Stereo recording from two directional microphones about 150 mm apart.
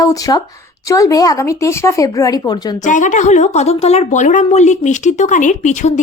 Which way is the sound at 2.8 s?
55° left (ahead or behind).